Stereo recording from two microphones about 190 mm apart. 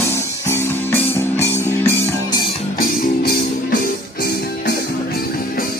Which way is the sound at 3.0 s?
50° left (ahead or behind).